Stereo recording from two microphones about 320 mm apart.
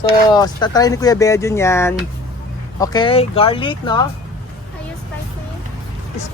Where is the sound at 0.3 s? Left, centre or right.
Centre.